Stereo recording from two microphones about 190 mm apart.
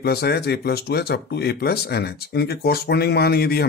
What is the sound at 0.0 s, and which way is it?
Speech, 55° left (ahead or behind).